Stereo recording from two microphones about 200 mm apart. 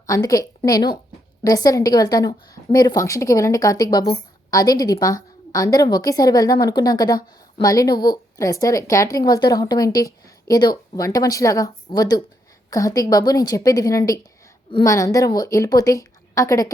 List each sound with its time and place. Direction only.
0.1 s a woman's voice: 15° left (ahead or behind)